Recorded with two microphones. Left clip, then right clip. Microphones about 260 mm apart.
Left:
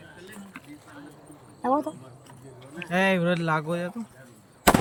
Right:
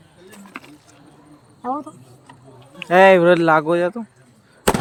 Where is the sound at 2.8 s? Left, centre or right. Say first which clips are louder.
Right 13 dB; centre.